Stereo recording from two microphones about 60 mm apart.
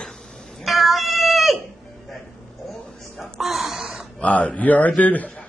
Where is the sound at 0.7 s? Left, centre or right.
Centre.